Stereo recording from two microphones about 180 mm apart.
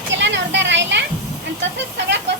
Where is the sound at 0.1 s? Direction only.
85° right.